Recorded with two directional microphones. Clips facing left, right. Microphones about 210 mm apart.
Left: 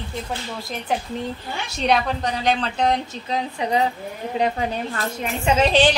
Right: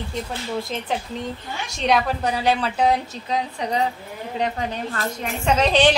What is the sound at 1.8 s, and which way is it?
A woman's voice, 10° right (ahead or behind).